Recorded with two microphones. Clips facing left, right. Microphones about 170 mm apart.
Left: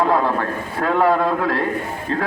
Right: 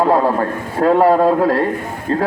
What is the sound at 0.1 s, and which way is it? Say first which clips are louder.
A man's voice: right 4 dB; 35° right (ahead or behind).